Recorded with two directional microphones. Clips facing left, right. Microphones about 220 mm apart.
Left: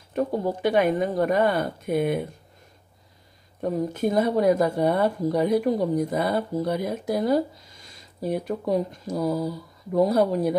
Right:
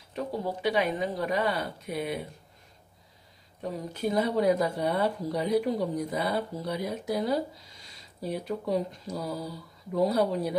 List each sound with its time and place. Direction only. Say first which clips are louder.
0.1 s speech: left 7 dB; 50° left (ahead or behind)
3.6 s speech: left 7 dB; 50° left (ahead or behind)